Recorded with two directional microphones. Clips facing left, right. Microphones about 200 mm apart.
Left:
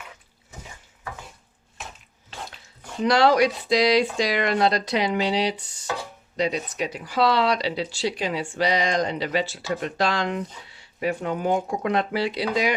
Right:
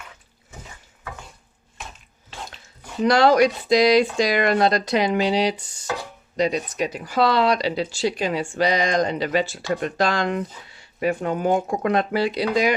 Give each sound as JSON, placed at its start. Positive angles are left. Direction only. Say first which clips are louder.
{"t": 3.0, "sound": "speech", "louder": "right 2 dB", "side_deg": -45}